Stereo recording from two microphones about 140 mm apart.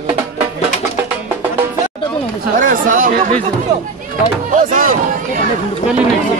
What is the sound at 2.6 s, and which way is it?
Chatter, 75° right (ahead or behind).